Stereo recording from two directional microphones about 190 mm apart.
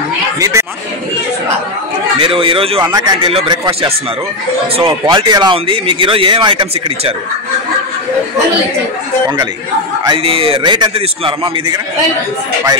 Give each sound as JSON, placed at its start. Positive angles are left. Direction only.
{"t": 0.4, "sound": "chatter", "side_deg": -15}
{"t": 2.1, "sound": "speech", "side_deg": -30}
{"t": 10.0, "sound": "speech", "side_deg": -30}